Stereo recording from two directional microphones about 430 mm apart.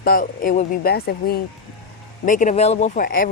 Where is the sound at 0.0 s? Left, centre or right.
Centre.